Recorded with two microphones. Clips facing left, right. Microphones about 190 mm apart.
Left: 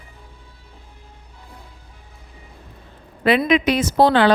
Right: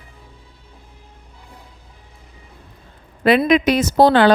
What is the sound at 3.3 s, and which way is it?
A woman's voice, 45° right (ahead or behind).